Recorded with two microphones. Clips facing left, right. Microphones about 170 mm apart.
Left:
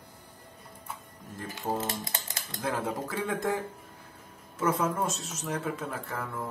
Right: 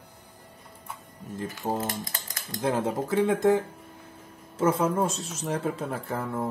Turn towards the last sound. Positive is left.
turn(degrees=-30)  # may be behind; listen again after turning